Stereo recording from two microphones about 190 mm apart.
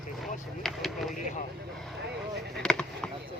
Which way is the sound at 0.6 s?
Centre (ahead or behind).